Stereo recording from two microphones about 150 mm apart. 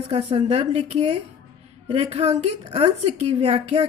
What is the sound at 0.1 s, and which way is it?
A woman's voice, 40° right (ahead or behind).